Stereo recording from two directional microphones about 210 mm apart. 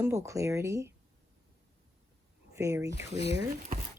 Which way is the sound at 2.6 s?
15° right (ahead or behind).